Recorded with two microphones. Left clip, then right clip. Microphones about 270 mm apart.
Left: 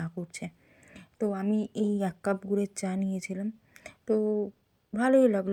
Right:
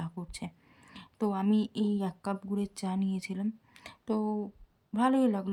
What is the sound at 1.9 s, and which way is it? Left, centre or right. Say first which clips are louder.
Speech: left 5 dB; centre.